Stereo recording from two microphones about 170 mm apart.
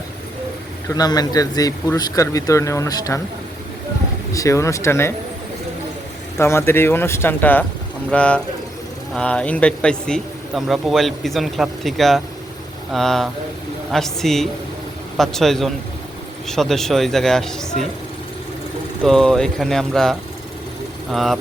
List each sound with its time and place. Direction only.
0.9 s a man's voice: 20° left (ahead or behind)
4.3 s speech: 20° left (ahead or behind)
6.4 s a man's voice: 15° left (ahead or behind)
19.0 s a man's voice: centre (ahead or behind)